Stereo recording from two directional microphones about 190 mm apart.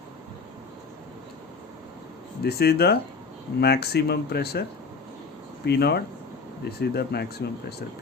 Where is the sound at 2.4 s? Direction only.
55° left (ahead or behind).